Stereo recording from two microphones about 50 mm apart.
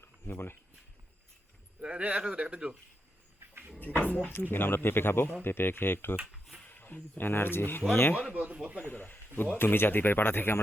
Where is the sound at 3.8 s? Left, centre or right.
Left.